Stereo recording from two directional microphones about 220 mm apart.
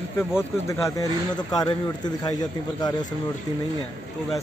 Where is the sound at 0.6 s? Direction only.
15° left (ahead or behind).